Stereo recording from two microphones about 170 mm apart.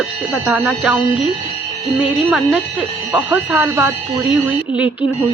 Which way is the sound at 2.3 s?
5° right (ahead or behind).